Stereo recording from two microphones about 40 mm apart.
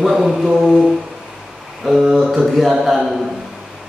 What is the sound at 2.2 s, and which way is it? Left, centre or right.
Mantra, centre.